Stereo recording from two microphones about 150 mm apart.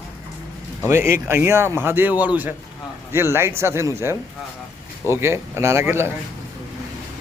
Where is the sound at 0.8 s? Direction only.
15° right (ahead or behind).